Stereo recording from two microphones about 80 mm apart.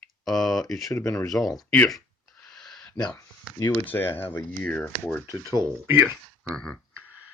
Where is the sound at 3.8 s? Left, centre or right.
Left.